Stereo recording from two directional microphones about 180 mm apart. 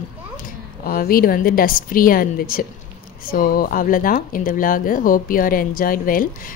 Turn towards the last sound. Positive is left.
turn(degrees=50)  # may be behind; listen again after turning